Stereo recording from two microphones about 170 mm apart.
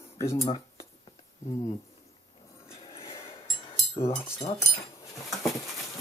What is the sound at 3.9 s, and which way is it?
Speech, 35° left (ahead or behind).